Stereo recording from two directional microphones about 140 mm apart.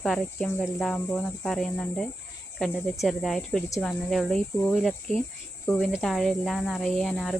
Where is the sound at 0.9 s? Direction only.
10° left (ahead or behind).